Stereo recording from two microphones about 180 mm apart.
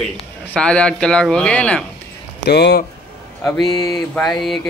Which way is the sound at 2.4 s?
65° left (ahead or behind).